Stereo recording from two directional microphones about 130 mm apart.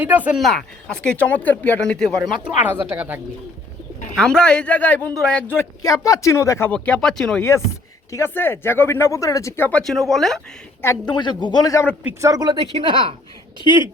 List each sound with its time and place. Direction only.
0.0 s speech: 10° right (ahead or behind)
0.3 s speech: centre (ahead or behind)
2.4 s speech: 10° right (ahead or behind)
4.1 s speech: 5° left (ahead or behind)
5.8 s speech: 25° left (ahead or behind)
6.7 s speech: 10° left (ahead or behind)
8.1 s speech: 20° left (ahead or behind)
9.8 s speech: centre (ahead or behind)
11.0 s speech: 35° left (ahead or behind)
12.2 s speech: 30° right (ahead or behind)
12.8 s a woman's voice: 40° right (ahead or behind)